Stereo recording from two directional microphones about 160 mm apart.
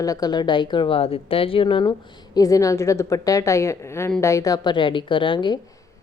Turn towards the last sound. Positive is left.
turn(degrees=25)  # may be behind; listen again after turning